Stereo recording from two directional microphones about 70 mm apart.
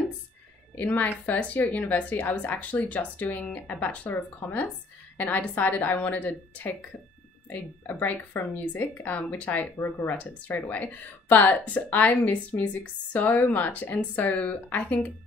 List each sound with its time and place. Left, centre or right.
0.7 s a woman's voice: left